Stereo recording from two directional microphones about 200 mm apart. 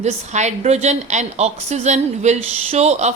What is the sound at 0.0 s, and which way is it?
A woman's voice, 35° right (ahead or behind).